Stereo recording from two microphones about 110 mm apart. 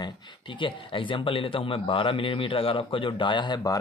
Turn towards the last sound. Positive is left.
turn(degrees=45)  # may be behind; listen again after turning